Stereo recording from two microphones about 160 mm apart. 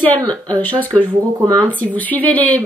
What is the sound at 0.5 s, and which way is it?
Speech, 10° left (ahead or behind).